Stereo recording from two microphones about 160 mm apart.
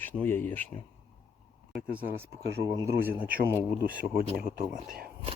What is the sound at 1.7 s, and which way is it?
Speech, 10° right (ahead or behind).